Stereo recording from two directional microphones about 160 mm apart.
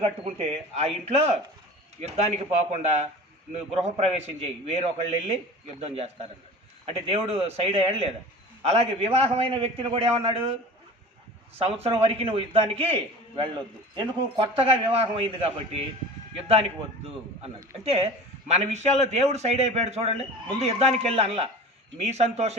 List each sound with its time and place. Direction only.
0.3 s a man's voice: 40° right (ahead or behind)
17.8 s a man's voice: 40° right (ahead or behind)